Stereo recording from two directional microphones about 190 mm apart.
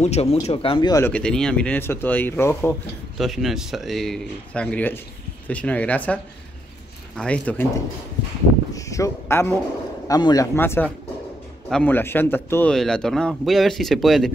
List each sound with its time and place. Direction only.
0.0 s speech: 35° left (ahead or behind)
1.1 s speech: 5° left (ahead or behind)
3.2 s speech: centre (ahead or behind)
7.2 s speech: 5° left (ahead or behind)
8.7 s a sound: 15° left (ahead or behind)
10.0 s speech: 20° left (ahead or behind); by 14.3 s centre (ahead or behind)